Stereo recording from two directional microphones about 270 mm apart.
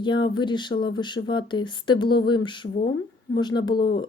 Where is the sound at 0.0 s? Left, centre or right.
Centre.